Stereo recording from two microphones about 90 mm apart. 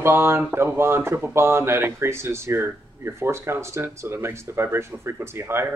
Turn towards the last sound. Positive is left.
turn(degrees=-25)  # may be behind; listen again after turning